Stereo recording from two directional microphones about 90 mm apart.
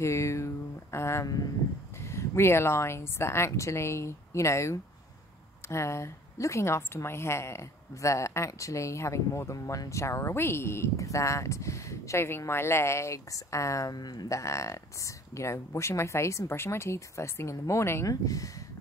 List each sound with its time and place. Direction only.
0.0 s a woman's voice: 35° left (ahead or behind); by 14.4 s 50° left (ahead or behind)
14.4 s a woman's voice: 35° left (ahead or behind)
18.0 s a woman's voice: 40° left (ahead or behind)